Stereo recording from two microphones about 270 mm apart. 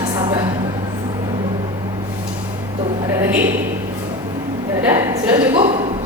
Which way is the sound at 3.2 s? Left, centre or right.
Centre.